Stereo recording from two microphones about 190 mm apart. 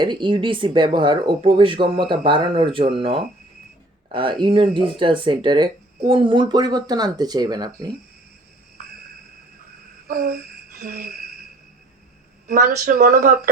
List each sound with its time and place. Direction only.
0.0 s speech: 25° right (ahead or behind)
10.1 s a sound: 50° right (ahead or behind)
12.5 s speech: 50° right (ahead or behind)